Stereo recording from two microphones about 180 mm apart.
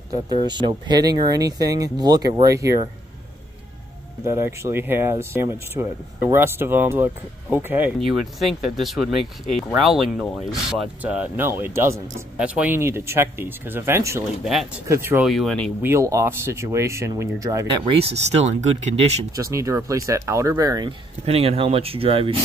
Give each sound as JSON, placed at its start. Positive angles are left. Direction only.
{"t": 0.1, "sound": "speech", "side_deg": -25}
{"t": 4.2, "sound": "speech", "side_deg": -15}
{"t": 8.0, "sound": "speech", "side_deg": 0}
{"t": 14.4, "sound": "speech", "side_deg": 0}
{"t": 14.9, "sound": "speech", "side_deg": -15}
{"t": 15.2, "sound": "speech", "side_deg": 0}
{"t": 15.8, "sound": "speech", "side_deg": -15}
{"t": 17.9, "sound": "speech", "side_deg": -35}
{"t": 19.3, "sound": "speech", "side_deg": -15}
{"t": 21.3, "sound": "speech", "side_deg": -35}